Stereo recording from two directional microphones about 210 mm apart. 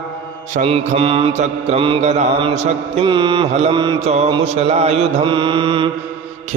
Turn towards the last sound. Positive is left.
turn(degrees=-25)  # may be behind; listen again after turning